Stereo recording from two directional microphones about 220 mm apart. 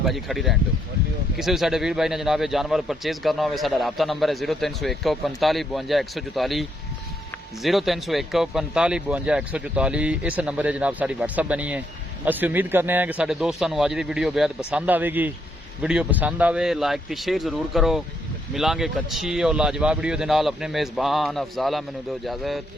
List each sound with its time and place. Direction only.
0.0 s a man's voice: centre (ahead or behind)